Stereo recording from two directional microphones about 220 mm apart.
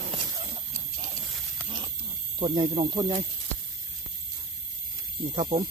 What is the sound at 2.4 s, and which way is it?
Speech, 20° right (ahead or behind).